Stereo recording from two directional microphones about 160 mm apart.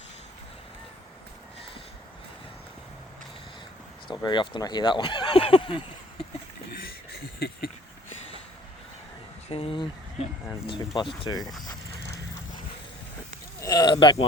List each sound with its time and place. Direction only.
4.1 s speech: 25° left (ahead or behind)
7.1 s a sound: 85° left
9.5 s speech: 35° left (ahead or behind)
13.6 s speech: 25° left (ahead or behind)